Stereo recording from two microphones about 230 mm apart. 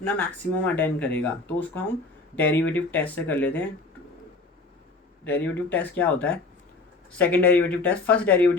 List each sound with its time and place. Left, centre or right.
0.0 s speech: centre
5.2 s speech: centre